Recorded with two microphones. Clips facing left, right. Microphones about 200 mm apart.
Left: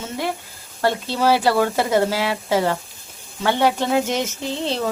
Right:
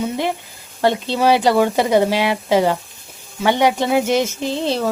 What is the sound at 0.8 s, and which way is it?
Speech, 20° right (ahead or behind).